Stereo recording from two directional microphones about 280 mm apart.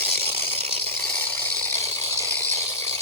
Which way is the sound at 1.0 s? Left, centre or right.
Centre.